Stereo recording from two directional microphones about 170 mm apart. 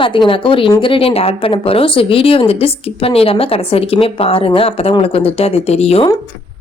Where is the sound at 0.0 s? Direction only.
30° left (ahead or behind).